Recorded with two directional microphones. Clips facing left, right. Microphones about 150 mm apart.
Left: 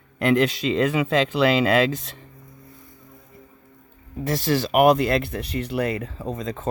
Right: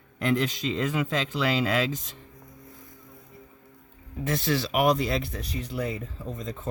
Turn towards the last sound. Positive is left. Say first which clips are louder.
# left 6 dB
turn(degrees=90)